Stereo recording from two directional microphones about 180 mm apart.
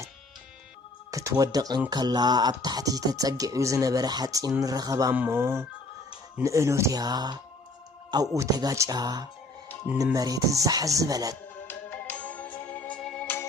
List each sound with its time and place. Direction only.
1.1 s speech: 20° right (ahead or behind)
11.7 s music: 10° left (ahead or behind)